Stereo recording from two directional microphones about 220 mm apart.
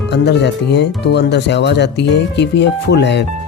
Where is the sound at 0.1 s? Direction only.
50° left (ahead or behind).